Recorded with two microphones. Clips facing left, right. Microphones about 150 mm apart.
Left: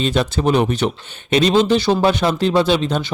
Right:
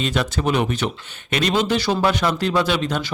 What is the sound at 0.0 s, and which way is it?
Speech, 30° left (ahead or behind).